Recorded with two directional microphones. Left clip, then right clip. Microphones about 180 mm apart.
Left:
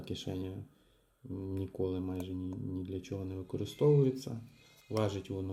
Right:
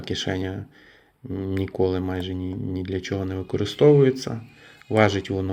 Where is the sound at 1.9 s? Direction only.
10° right (ahead or behind).